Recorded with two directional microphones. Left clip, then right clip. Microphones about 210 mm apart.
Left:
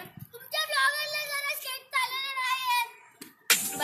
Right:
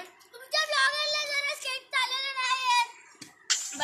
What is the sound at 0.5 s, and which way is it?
Child singing, 20° right (ahead or behind).